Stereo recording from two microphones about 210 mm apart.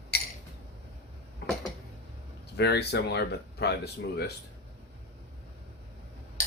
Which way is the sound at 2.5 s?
50° left (ahead or behind).